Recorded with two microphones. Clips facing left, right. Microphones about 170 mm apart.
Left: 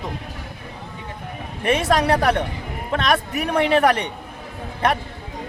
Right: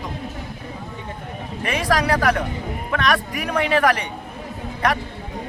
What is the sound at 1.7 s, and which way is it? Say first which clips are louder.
Speech: left 3 dB; 25° left (ahead or behind).